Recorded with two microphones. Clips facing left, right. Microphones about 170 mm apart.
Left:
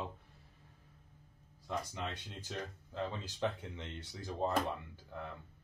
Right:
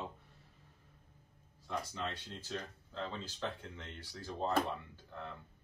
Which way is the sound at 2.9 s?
15° left (ahead or behind).